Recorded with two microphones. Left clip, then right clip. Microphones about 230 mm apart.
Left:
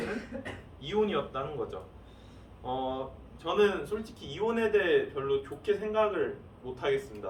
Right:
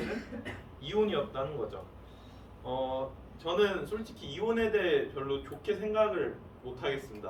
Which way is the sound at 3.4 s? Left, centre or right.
Left.